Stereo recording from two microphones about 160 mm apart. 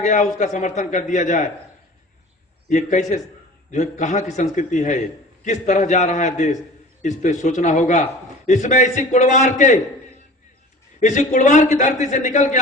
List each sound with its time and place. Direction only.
0.0 s a man's voice: 50° left (ahead or behind)
2.6 s a man's voice: 50° left (ahead or behind)
11.0 s a man's voice: 50° left (ahead or behind)